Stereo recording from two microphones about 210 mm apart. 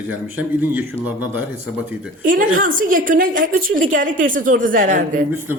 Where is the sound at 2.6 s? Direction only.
40° right (ahead or behind).